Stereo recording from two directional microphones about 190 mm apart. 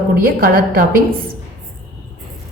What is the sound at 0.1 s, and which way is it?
Speech, 50° right (ahead or behind).